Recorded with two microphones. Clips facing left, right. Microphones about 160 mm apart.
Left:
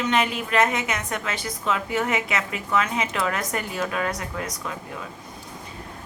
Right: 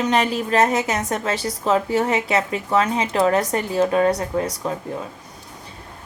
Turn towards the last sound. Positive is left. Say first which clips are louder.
# right 8 dB
turn(degrees=-30)  # may be behind; listen again after turning